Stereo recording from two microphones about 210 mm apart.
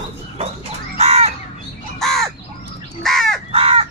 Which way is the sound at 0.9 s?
30° right (ahead or behind).